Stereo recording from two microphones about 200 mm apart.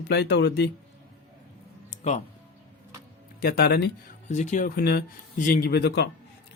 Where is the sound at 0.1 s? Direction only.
55° left (ahead or behind).